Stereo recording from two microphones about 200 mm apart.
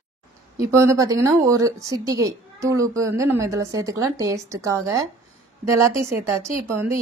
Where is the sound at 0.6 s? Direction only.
15° right (ahead or behind).